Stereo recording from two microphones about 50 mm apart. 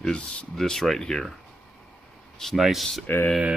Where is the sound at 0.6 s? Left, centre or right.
Centre.